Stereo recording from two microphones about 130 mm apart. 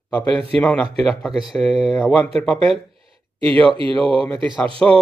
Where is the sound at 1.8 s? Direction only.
Centre (ahead or behind).